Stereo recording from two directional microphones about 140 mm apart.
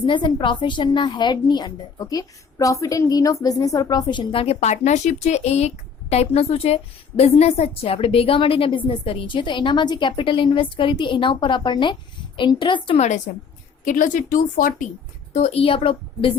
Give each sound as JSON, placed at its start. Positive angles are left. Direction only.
{"t": 0.0, "sound": "a woman's voice", "side_deg": 35}
{"t": 13.0, "sound": "a woman's voice", "side_deg": 55}
{"t": 13.8, "sound": "speech", "side_deg": 70}
{"t": 15.3, "sound": "speech", "side_deg": 55}